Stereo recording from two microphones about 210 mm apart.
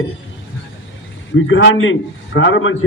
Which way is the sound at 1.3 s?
65° left (ahead or behind).